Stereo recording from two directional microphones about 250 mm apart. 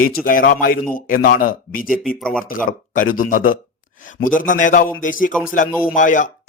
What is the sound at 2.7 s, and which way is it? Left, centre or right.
A man's voice, left.